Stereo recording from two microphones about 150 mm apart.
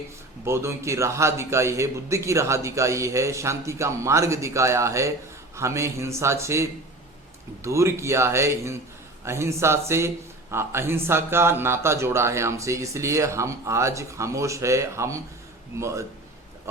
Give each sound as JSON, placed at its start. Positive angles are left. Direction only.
{"t": 0.4, "sound": "a man's voice", "side_deg": -20}